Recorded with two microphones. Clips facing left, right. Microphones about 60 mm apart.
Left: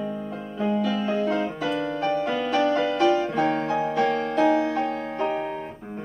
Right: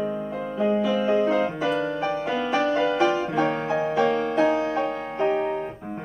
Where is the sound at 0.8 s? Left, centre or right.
Centre.